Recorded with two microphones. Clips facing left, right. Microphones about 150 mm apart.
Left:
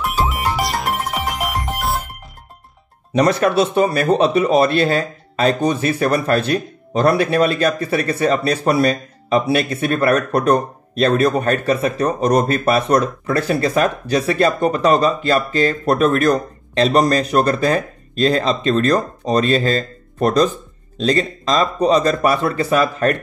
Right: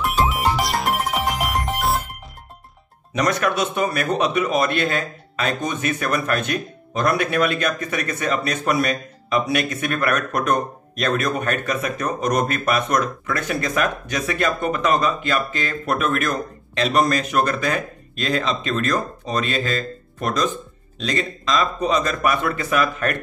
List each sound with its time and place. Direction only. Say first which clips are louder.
0.0 s music: even; centre (ahead or behind)
3.1 s speech: left 6 dB; 30° left (ahead or behind)